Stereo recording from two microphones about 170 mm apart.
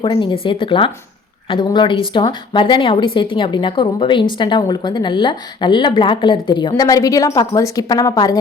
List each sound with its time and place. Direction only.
0.0 s a woman's voice: 30° left (ahead or behind)